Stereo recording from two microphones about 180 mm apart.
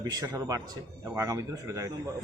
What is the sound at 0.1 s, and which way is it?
A man's voice, 20° right (ahead or behind).